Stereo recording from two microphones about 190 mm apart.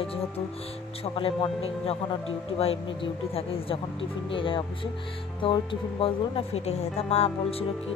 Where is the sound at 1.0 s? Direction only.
30° left (ahead or behind).